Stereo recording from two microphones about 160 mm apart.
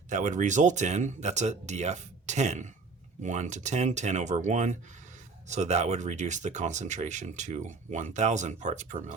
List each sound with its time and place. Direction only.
0.1 s speech: 50° right (ahead or behind)